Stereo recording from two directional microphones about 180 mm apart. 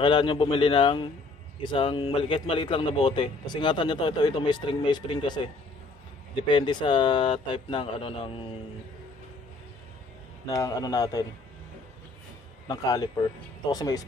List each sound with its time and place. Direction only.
0.0 s a man's voice: 25° left (ahead or behind)
6.5 s a man's voice: 25° left (ahead or behind)
10.4 s a man's voice: 20° left (ahead or behind)
12.6 s a man's voice: 20° left (ahead or behind)